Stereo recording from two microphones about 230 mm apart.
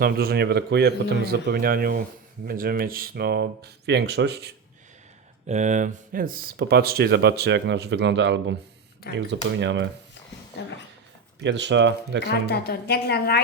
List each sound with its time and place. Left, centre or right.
0.0 s speech: right
5.5 s speech: right
10.6 s a woman's voice: left
11.3 s speech: right
12.2 s a woman's voice: left